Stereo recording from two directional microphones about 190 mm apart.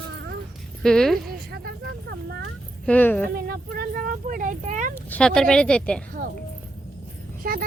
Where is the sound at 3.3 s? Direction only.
55° right (ahead or behind).